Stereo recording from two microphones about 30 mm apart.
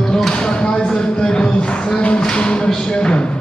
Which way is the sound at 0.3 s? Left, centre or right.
Left.